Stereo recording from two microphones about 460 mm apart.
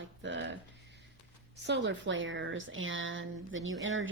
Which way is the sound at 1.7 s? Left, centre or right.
Right.